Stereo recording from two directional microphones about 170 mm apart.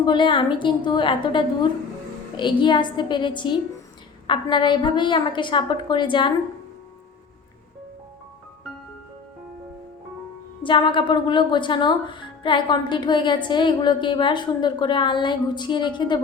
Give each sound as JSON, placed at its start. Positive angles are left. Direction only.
{"t": 0.0, "sound": "speech", "side_deg": 25}
{"t": 10.6, "sound": "speech", "side_deg": 30}